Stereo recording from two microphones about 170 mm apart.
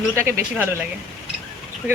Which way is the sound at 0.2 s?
15° right (ahead or behind).